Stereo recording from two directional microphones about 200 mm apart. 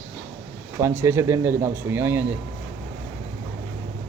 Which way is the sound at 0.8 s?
15° right (ahead or behind).